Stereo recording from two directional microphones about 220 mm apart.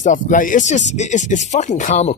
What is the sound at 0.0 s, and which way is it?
Speech, 35° left (ahead or behind).